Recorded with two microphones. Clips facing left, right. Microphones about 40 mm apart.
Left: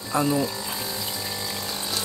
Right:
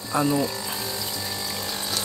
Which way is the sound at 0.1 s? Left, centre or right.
Centre.